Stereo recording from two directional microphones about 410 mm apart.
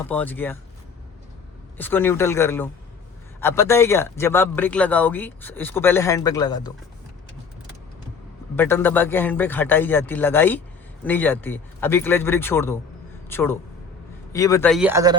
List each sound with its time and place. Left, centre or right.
0.1 s speech: centre
1.8 s speech: centre
8.5 s speech: centre